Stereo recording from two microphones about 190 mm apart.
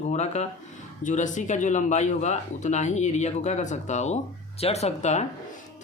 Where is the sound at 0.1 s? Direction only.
35° left (ahead or behind).